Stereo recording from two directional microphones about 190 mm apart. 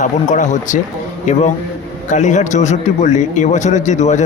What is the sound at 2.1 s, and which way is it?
A man's voice, 40° left (ahead or behind).